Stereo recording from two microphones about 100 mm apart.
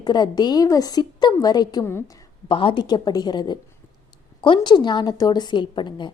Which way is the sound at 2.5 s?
60° left (ahead or behind).